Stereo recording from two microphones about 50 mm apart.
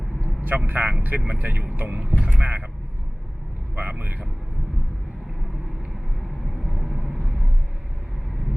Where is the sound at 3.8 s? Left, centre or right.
Right.